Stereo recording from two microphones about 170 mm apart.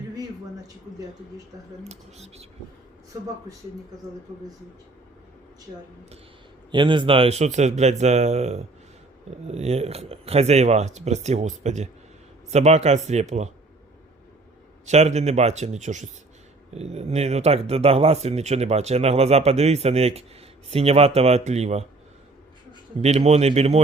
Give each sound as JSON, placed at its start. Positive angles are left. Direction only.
{"t": 1.8, "sound": "speech", "side_deg": -40}
{"t": 6.7, "sound": "speech", "side_deg": -30}
{"t": 14.8, "sound": "speech", "side_deg": -40}
{"t": 23.0, "sound": "speech", "side_deg": -40}